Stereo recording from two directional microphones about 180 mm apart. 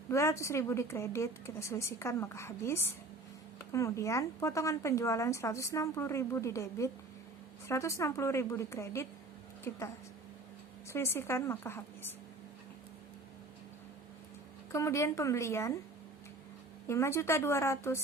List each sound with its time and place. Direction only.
0.1 s speech: 15° left (ahead or behind)
14.7 s speech: 15° left (ahead or behind)
16.8 s speech: 15° left (ahead or behind)